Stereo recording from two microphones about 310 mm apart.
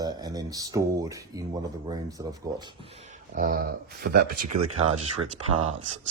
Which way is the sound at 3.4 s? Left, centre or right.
Right.